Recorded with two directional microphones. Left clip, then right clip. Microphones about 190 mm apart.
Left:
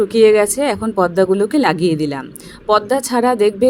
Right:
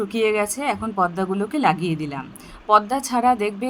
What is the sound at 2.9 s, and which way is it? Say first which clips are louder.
Music: left 4 dB; 20° left (ahead or behind).